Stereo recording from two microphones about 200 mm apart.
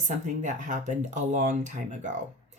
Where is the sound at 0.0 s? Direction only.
40° right (ahead or behind).